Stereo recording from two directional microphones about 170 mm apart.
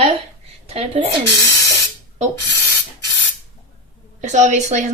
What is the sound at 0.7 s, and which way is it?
Speech, 35° right (ahead or behind).